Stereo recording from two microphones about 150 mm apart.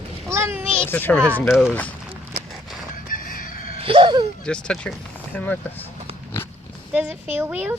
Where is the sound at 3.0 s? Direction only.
70° left (ahead or behind).